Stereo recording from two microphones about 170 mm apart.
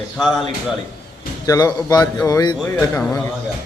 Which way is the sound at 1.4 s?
20° left (ahead or behind).